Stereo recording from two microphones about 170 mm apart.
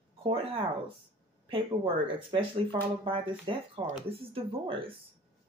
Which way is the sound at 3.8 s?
40° right (ahead or behind).